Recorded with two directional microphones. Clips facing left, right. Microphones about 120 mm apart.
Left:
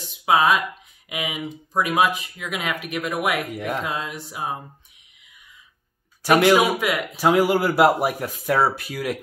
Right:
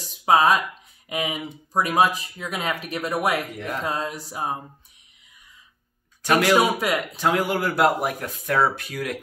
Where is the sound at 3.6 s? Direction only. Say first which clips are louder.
Left 3 dB; 5° left (ahead or behind).